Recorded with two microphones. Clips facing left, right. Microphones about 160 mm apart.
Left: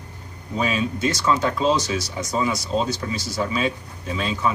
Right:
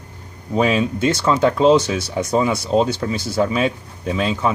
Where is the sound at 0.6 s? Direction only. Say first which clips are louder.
Right 6 dB; 60° right (ahead or behind).